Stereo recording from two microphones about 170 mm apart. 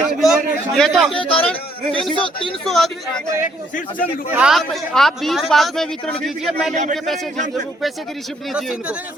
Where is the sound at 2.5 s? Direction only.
Centre (ahead or behind).